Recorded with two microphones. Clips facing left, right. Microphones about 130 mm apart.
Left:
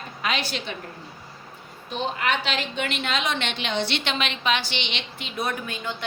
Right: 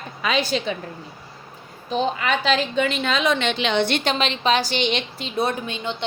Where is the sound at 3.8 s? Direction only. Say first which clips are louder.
Right 5 dB; 45° right (ahead or behind).